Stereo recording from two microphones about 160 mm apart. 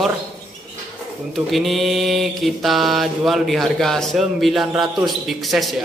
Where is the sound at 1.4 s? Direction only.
Centre (ahead or behind).